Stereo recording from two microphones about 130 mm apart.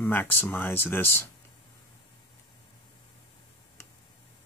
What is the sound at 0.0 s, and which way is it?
Speech, 15° left (ahead or behind).